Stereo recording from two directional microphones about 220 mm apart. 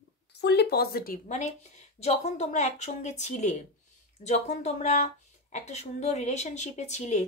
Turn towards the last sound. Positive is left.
turn(degrees=30)  # may be behind; listen again after turning